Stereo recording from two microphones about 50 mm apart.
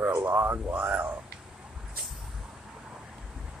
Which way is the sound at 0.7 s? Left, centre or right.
Right.